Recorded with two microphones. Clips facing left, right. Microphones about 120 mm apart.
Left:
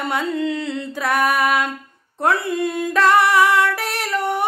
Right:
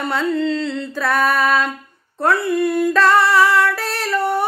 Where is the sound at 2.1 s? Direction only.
20° left (ahead or behind).